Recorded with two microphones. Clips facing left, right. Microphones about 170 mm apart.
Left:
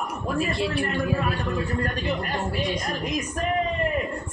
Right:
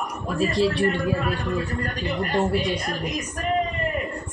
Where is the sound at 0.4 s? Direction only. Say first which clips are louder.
Right 5 dB; 35° right (ahead or behind).